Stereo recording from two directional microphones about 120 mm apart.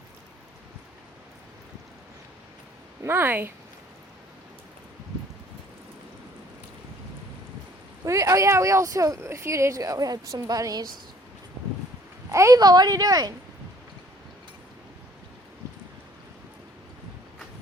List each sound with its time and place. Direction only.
3.0 s speech: 20° right (ahead or behind)
8.0 s speech: 25° right (ahead or behind)
12.3 s speech: 25° right (ahead or behind)